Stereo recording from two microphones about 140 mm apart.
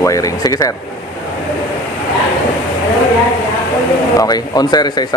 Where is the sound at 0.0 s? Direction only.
25° left (ahead or behind).